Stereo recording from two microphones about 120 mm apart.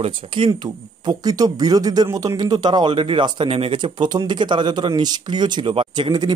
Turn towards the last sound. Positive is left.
turn(degrees=-35)  # may be behind; listen again after turning